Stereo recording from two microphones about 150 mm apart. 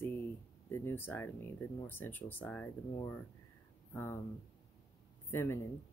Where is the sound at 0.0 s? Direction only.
15° left (ahead or behind).